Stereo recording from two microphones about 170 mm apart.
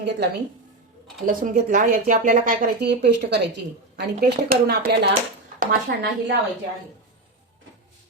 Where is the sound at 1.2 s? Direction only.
50° right (ahead or behind).